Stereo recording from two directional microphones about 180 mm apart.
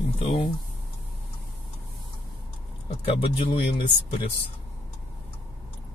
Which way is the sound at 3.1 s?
30° left (ahead or behind).